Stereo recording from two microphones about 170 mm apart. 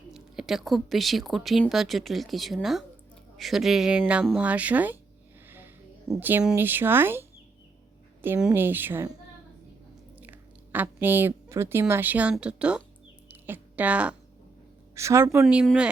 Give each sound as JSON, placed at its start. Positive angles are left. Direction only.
{"t": 0.1, "sound": "a woman's voice", "side_deg": 0}
{"t": 10.2, "sound": "speech", "side_deg": -10}
{"t": 13.2, "sound": "a sound", "side_deg": -10}
{"t": 14.9, "sound": "a woman's voice", "side_deg": -15}